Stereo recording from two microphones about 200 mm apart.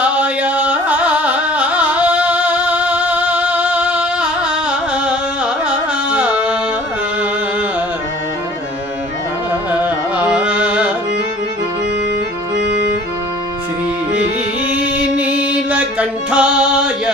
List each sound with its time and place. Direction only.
0.0 s music: 5° right (ahead or behind)
5.6 s music: 5° right (ahead or behind)
9.8 s carnatic music: 5° right (ahead or behind)
14.7 s music: 5° right (ahead or behind)